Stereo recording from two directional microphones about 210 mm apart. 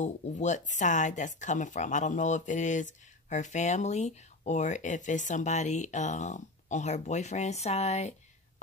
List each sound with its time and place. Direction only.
0.0 s speech: 35° left (ahead or behind)